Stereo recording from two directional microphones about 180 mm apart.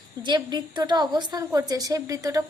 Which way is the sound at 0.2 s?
25° right (ahead or behind).